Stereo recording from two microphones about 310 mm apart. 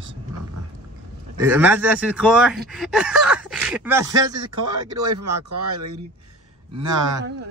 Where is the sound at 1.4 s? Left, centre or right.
Centre.